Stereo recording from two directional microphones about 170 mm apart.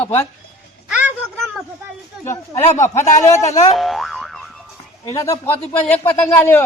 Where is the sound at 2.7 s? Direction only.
45° left (ahead or behind).